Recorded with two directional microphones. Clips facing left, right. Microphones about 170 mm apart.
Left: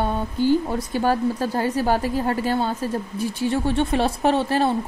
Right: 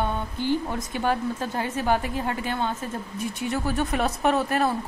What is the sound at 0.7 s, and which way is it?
Speech, 35° left (ahead or behind).